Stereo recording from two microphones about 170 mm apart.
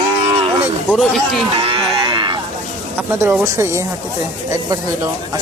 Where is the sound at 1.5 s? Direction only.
30° right (ahead or behind).